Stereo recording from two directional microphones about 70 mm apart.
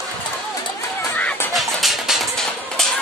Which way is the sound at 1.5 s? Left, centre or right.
Centre.